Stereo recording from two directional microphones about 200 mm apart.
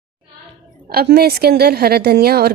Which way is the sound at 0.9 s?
50° right (ahead or behind).